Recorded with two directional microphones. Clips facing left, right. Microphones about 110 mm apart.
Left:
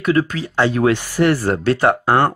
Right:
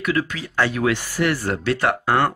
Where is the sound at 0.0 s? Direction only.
35° left (ahead or behind).